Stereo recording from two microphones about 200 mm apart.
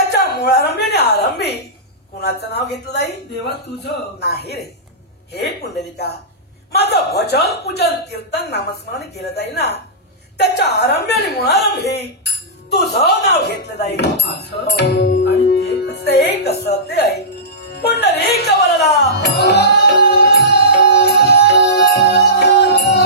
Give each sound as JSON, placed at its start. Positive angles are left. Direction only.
{"t": 0.1, "sound": "a sound", "side_deg": 55}
{"t": 2.4, "sound": "speech", "side_deg": 55}
{"t": 18.0, "sound": "music", "side_deg": 55}